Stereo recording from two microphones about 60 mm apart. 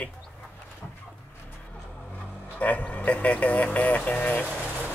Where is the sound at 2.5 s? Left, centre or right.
Left.